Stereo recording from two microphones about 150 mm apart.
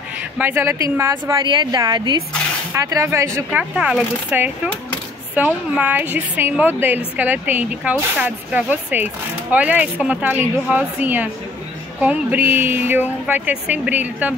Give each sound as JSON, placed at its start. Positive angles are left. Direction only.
{"t": 0.4, "sound": "a woman's voice", "side_deg": -15}
{"t": 3.7, "sound": "speech", "side_deg": -5}